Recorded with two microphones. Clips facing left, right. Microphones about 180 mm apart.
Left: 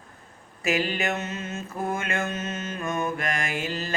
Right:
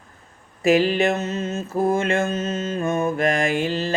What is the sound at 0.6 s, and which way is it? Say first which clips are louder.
Mantra: right 9 dB; 35° right (ahead or behind).